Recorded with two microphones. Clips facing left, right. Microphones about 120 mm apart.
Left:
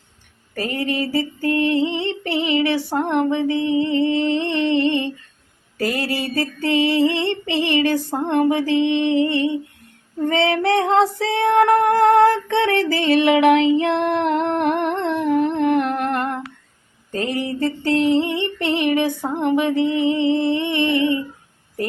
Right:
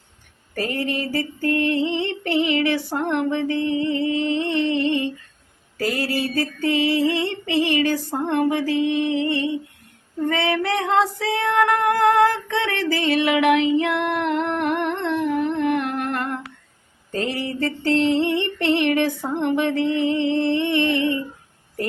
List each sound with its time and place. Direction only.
0.5 s female singing: 25° left (ahead or behind)
4.0 s female singing: 30° left (ahead or behind)
5.7 s mantra: 25° left (ahead or behind)
6.7 s female singing: 25° left (ahead or behind)
14.7 s humming: 30° left (ahead or behind)
15.0 s humming: 45° left (ahead or behind); by 16.3 s 25° left (ahead or behind)
17.4 s music: 20° left (ahead or behind)